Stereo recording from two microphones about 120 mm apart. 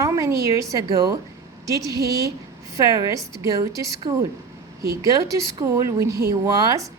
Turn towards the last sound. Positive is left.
turn(degrees=-30)  # may be behind; listen again after turning